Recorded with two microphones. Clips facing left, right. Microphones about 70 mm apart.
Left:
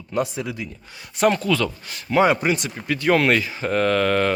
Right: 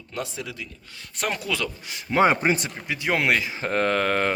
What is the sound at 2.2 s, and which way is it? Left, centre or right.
Speech, right.